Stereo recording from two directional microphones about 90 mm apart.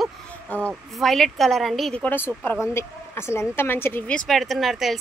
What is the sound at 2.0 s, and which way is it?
Speech, 20° left (ahead or behind).